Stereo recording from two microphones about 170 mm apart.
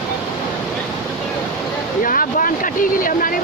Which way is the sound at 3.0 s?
55° left (ahead or behind).